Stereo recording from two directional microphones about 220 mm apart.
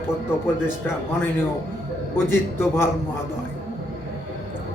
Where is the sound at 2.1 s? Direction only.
10° left (ahead or behind).